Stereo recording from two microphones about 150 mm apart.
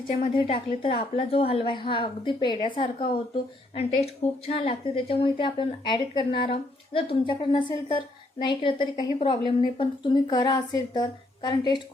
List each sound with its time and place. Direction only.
0.3 s a woman's voice: 40° left (ahead or behind)